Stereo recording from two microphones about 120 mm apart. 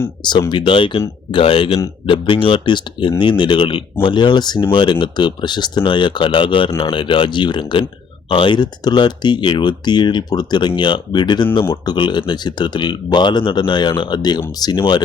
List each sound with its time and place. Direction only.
0.3 s speech: 40° left (ahead or behind)